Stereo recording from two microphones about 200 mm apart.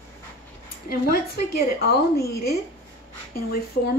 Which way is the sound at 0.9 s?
50° left (ahead or behind).